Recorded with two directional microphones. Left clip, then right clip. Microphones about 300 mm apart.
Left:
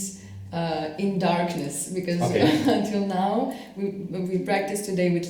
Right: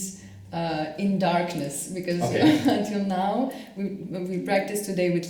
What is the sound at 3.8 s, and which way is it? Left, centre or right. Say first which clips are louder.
A woman's voice: left 3 dB; centre.